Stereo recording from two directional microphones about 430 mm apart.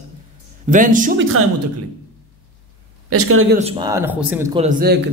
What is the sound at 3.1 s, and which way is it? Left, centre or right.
Speech, right.